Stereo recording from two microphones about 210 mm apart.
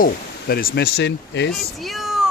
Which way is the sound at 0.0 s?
45° left (ahead or behind).